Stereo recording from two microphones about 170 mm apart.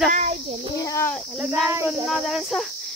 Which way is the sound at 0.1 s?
40° right (ahead or behind).